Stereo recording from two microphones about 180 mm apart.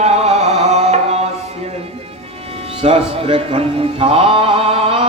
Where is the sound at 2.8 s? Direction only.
35° right (ahead or behind).